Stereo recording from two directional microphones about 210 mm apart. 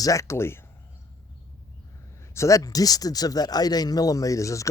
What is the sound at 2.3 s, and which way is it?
Speech, 15° left (ahead or behind).